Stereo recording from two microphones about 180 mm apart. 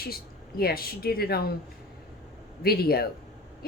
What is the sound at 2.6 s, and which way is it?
Speech, 60° left (ahead or behind).